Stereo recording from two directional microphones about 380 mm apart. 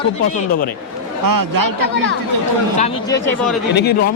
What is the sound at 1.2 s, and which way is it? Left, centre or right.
Speech, right.